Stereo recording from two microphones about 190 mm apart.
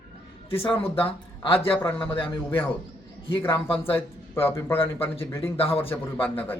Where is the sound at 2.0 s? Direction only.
25° left (ahead or behind).